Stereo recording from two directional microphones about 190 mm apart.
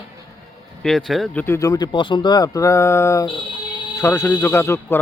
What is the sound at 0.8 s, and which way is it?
Speech, centre (ahead or behind).